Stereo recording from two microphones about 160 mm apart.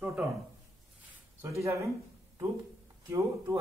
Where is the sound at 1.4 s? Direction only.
20° right (ahead or behind).